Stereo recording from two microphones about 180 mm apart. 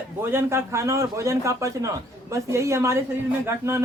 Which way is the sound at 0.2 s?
15° right (ahead or behind).